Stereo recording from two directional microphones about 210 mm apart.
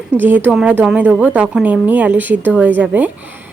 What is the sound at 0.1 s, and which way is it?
Speech, 10° right (ahead or behind).